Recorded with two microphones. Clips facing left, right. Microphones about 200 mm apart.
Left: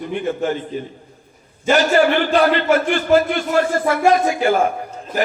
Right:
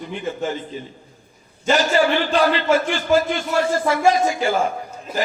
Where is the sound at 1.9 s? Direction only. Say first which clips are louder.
Left 3 dB; 55° left (ahead or behind).